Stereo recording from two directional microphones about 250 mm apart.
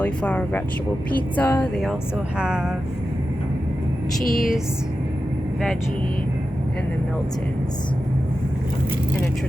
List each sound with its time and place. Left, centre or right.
0.0 s speech: centre
4.2 s speech: left